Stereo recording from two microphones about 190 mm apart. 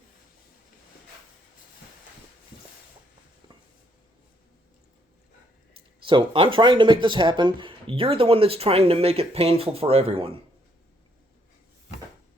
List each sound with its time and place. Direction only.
6.1 s speech: 25° right (ahead or behind)